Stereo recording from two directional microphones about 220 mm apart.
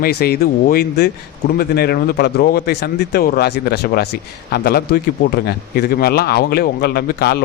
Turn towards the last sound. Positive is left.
turn(degrees=45)  # may be behind; listen again after turning